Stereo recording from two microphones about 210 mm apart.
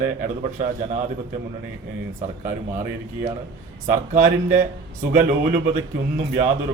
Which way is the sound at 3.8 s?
40° right (ahead or behind).